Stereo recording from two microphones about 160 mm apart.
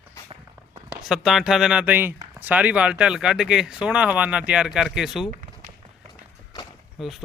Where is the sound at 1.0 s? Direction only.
Centre (ahead or behind).